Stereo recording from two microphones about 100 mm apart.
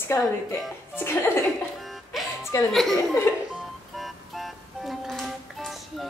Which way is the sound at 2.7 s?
Centre (ahead or behind).